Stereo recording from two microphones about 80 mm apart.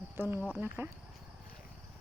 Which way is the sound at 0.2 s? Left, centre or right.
Right.